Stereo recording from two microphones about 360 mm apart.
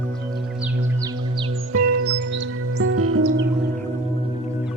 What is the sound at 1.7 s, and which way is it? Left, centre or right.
Music, right.